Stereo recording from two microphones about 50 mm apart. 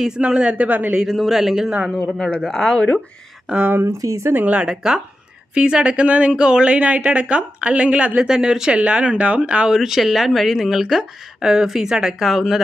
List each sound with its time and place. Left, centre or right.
0.2 s speech: centre
0.5 s a man's voice: right
1.0 s a man's voice: centre
2.0 s speech: centre
3.5 s a man's voice: right
3.8 s speech: right
4.5 s speech: centre
8.2 s speech: centre
8.7 s speech: right
9.7 s speech: centre